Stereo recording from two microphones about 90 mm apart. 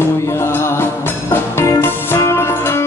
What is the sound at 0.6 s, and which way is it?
Music, 30° left (ahead or behind).